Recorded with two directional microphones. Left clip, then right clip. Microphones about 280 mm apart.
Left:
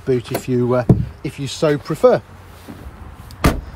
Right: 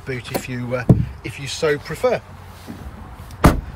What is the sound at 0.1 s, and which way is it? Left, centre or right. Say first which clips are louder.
Speech: left 7 dB; centre.